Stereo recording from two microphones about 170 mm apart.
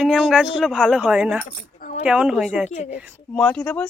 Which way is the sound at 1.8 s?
45° left (ahead or behind).